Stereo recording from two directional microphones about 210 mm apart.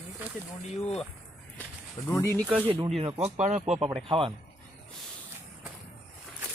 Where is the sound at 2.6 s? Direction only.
20° right (ahead or behind).